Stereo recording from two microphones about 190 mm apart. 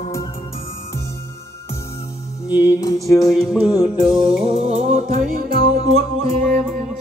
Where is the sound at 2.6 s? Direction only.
15° left (ahead or behind).